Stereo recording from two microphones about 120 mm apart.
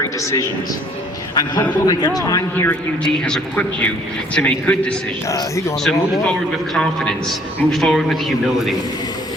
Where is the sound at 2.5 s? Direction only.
10° left (ahead or behind).